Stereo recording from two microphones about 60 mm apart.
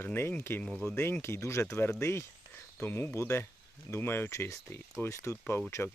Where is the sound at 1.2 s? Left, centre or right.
Left.